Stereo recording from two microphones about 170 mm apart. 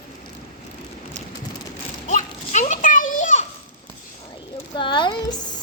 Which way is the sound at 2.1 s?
45° left (ahead or behind).